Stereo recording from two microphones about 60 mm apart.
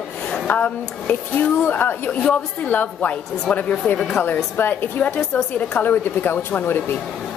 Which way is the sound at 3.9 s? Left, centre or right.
Left.